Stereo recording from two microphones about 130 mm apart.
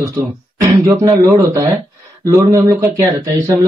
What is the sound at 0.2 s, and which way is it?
Speech, 15° right (ahead or behind).